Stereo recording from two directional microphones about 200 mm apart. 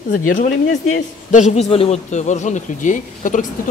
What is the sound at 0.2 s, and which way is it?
A man's voice, 40° left (ahead or behind).